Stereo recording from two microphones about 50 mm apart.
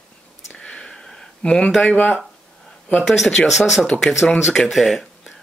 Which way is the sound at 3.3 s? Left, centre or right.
Centre.